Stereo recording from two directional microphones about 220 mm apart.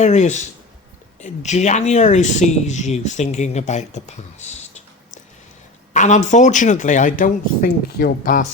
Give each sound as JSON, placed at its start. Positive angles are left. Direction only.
{"t": 0.0, "sound": "speech", "side_deg": 30}